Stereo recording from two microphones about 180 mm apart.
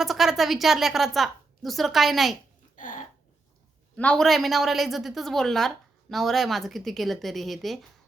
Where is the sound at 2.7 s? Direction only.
45° left (ahead or behind).